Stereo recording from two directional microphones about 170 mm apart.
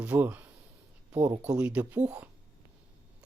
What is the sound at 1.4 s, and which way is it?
Speech, 5° right (ahead or behind).